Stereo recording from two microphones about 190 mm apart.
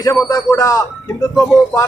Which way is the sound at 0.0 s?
20° left (ahead or behind).